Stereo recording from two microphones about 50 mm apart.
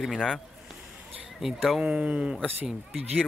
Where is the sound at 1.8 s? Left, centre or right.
Right.